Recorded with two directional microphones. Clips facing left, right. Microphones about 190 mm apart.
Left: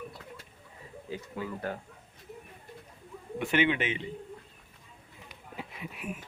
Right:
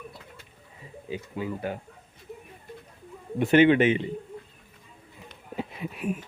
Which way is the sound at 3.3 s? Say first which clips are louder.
Right 9 dB; 40° right (ahead or behind).